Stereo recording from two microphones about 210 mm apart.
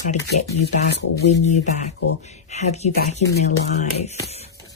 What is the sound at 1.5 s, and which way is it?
Speech, 35° left (ahead or behind).